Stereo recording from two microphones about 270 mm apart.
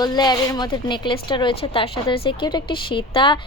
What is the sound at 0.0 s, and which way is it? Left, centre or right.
A woman's voice, centre.